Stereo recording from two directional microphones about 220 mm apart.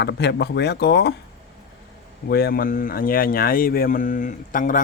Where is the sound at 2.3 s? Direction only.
45° left (ahead or behind).